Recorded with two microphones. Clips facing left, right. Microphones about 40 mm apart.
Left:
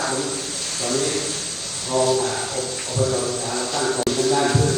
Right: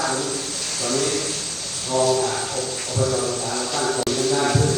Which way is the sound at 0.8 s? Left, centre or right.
Left.